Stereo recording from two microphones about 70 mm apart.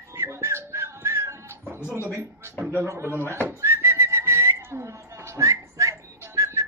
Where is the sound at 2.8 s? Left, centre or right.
Right.